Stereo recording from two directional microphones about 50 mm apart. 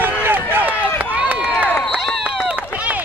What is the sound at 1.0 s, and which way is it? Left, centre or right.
Run, right.